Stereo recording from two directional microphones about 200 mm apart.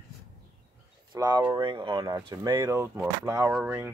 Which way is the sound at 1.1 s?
20° right (ahead or behind).